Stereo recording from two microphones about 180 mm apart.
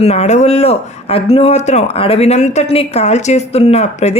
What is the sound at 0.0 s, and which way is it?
Speech, 35° left (ahead or behind).